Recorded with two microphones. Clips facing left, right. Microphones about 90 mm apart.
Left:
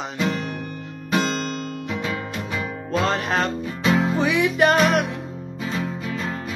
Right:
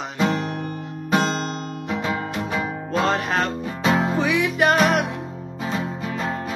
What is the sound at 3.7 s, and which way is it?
Music, 30° right (ahead or behind).